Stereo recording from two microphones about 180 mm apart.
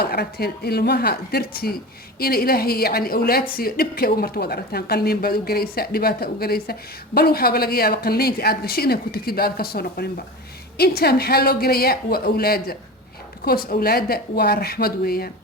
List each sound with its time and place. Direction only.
0.0 s a woman's voice: 60° left (ahead or behind)